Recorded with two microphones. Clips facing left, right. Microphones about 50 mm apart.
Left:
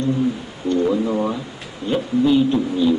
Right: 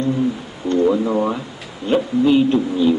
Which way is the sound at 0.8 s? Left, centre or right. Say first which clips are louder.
Right 2 dB; right.